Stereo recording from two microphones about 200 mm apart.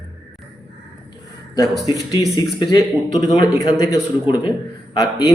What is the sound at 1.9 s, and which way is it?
Speech, 20° left (ahead or behind).